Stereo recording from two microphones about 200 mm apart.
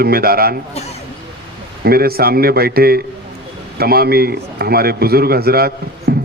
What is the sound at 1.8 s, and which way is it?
A man's voice, 50° right (ahead or behind).